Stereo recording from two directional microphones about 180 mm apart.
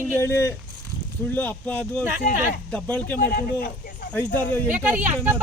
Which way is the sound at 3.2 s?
55° left (ahead or behind).